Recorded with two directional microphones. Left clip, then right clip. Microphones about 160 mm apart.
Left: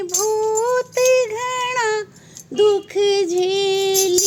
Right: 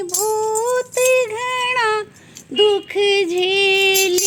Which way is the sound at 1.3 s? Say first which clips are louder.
Right 2 dB; 10° right (ahead or behind).